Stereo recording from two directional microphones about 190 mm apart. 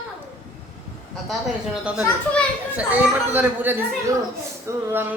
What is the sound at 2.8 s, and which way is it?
Speech, 10° right (ahead or behind).